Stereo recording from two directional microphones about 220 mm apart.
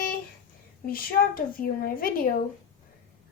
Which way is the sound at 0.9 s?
40° left (ahead or behind).